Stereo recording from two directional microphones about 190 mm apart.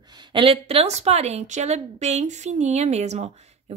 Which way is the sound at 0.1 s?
25° right (ahead or behind).